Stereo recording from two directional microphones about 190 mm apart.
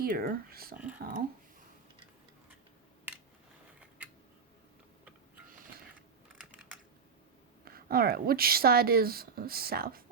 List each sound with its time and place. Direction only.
0.0 s a woman's voice: 50° right (ahead or behind)
3.8 s a sound: 5° right (ahead or behind)
7.6 s a woman's voice: 50° right (ahead or behind)